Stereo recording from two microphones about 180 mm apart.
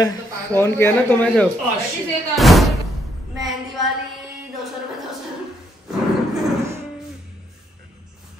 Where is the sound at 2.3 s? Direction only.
Centre (ahead or behind).